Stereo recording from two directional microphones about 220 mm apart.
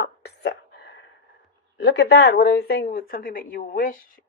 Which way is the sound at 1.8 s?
50° left (ahead or behind).